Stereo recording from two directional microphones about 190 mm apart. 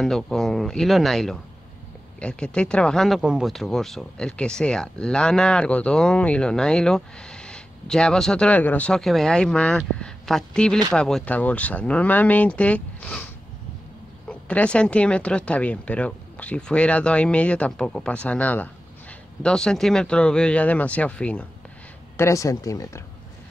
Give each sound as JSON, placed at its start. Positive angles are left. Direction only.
{"t": 0.0, "sound": "speech", "side_deg": 0}
{"t": 14.5, "sound": "speech", "side_deg": 5}